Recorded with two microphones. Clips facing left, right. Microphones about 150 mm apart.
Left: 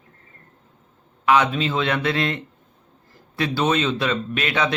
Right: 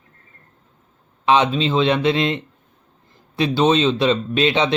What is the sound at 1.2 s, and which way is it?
Speech, 25° right (ahead or behind).